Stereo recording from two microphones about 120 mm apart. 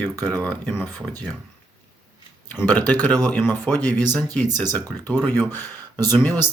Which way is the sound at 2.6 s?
15° left (ahead or behind).